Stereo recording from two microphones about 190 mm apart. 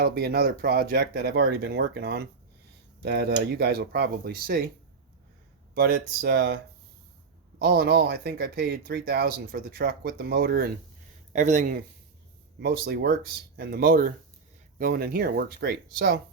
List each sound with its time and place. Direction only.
0.0 s speech: 55° right (ahead or behind)
5.7 s speech: 55° right (ahead or behind)
7.6 s speech: 55° right (ahead or behind)
11.3 s speech: 40° right (ahead or behind)
12.5 s speech: 55° right (ahead or behind)